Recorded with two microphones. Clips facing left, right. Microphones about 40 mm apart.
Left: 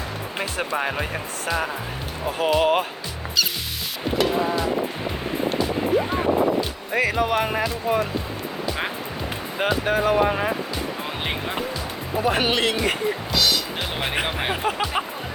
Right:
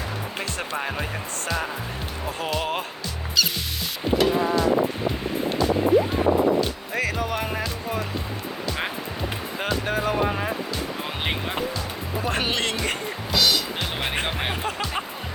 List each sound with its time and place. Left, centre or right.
0.3 s speech: centre
4.2 s speech: centre
9.6 s speech: centre
11.3 s speech: centre
12.2 s speech: centre